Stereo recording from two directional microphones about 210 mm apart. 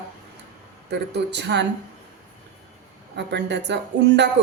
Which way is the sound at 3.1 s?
55° right (ahead or behind).